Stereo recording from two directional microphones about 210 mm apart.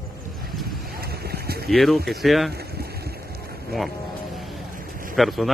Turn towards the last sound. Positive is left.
turn(degrees=0)  # may be behind; listen again after turning